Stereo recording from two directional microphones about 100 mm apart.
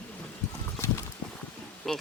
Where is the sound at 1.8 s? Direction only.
5° left (ahead or behind).